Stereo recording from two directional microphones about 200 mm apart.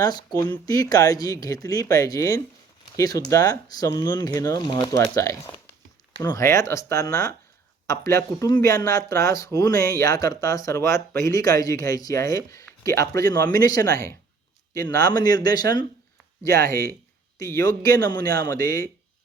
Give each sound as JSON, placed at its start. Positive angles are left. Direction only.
{"t": 0.0, "sound": "speech", "side_deg": 20}
{"t": 16.6, "sound": "speech", "side_deg": -45}
{"t": 17.5, "sound": "speech", "side_deg": 15}